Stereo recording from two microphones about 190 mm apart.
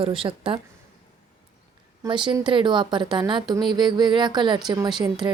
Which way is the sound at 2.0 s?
25° right (ahead or behind).